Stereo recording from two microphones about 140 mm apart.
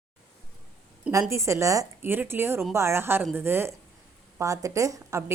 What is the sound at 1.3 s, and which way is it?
A woman's voice, 20° right (ahead or behind).